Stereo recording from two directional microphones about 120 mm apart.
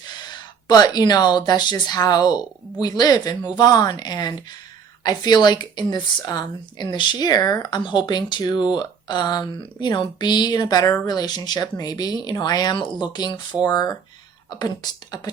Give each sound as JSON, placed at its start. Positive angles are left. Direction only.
{"t": 0.0, "sound": "speech", "side_deg": 35}